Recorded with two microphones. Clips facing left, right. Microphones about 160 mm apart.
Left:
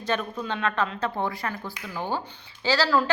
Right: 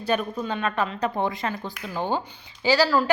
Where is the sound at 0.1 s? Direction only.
10° right (ahead or behind).